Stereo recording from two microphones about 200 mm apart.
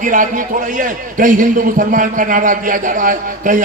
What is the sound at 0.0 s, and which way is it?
A man's voice, 40° right (ahead or behind).